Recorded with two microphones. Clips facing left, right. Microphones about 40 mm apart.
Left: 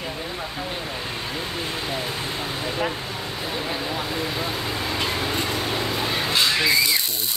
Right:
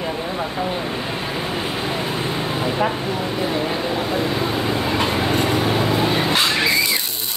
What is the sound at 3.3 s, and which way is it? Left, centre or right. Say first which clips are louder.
Speech: right 4 dB; right.